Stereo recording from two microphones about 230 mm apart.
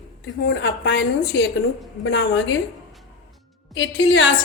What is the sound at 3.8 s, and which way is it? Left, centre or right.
Speech, left.